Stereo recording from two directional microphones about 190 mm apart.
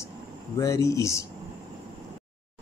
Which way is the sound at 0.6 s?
15° left (ahead or behind).